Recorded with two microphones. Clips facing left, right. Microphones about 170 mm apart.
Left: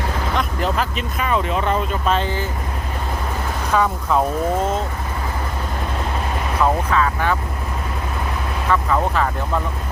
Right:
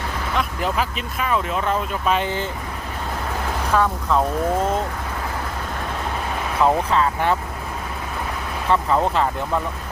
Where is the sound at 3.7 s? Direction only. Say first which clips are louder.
Left 1 dB; 5° left (ahead or behind).